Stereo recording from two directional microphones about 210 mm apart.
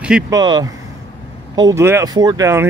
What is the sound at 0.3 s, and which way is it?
Speech, 20° right (ahead or behind).